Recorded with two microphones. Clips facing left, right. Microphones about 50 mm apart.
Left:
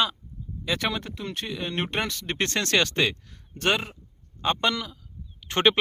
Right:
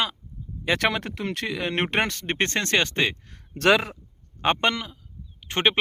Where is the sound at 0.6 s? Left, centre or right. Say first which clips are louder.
Right 4 dB; right.